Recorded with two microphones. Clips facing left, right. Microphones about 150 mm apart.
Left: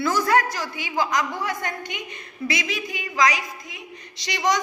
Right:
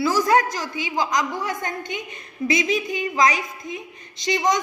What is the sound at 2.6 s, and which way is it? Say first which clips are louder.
Speech: right 7 dB; 20° right (ahead or behind).